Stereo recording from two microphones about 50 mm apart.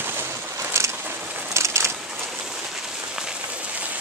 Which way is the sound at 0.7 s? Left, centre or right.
Right.